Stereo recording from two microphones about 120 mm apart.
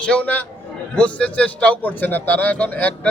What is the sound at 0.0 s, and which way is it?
A man's voice, 10° left (ahead or behind).